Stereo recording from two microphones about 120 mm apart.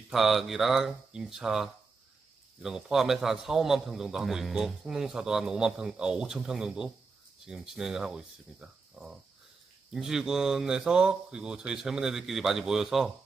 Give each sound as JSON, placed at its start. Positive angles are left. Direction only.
{"t": 0.1, "sound": "a man's voice", "side_deg": 0}